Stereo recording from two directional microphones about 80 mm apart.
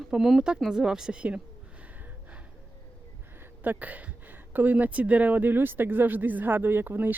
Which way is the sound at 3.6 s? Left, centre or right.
Right.